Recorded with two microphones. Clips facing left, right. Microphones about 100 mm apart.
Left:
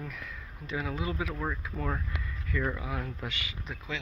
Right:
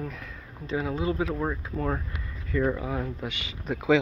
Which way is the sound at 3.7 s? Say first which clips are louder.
Right 18 dB; 90° right.